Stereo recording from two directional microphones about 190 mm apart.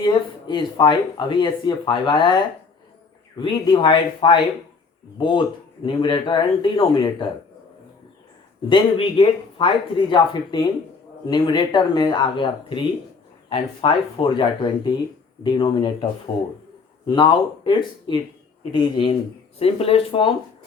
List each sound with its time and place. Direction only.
0.0 s speech: 25° left (ahead or behind)
8.7 s speech: 25° left (ahead or behind)
17.1 s speech: 25° left (ahead or behind)